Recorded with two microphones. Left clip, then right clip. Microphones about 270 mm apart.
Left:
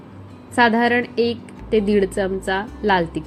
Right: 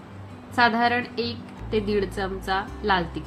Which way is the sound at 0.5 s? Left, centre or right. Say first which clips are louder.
Left 4 dB; centre.